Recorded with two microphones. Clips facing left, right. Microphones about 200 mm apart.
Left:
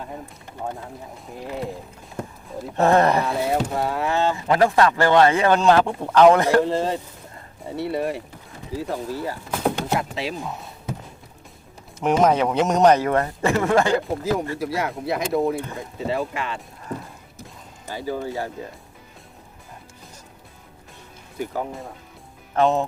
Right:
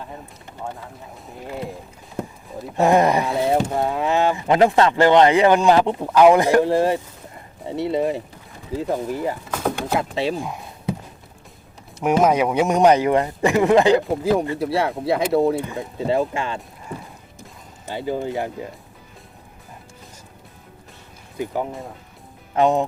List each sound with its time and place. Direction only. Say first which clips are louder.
2.7 s speech: right 1 dB; 15° right (ahead or behind)
10.0 s speech: right 5 dB; 30° right (ahead or behind)
10.4 s a sound: right 4 dB; 10° right (ahead or behind)
11.9 s speech: right 1 dB; 10° right (ahead or behind)
14.6 s speech: right 4 dB; 30° right (ahead or behind)
17.8 s speech: right 3 dB; 20° right (ahead or behind)
21.3 s speech: right 2 dB; 15° right (ahead or behind)